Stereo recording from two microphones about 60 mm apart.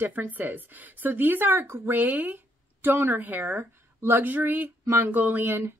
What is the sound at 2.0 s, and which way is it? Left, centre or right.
Speech, right.